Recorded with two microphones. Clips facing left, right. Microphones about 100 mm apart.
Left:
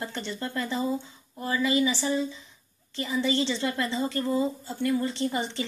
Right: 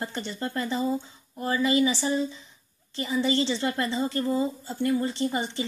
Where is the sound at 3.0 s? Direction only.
20° right (ahead or behind).